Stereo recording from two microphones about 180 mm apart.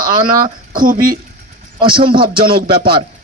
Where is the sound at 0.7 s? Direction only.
50° right (ahead or behind).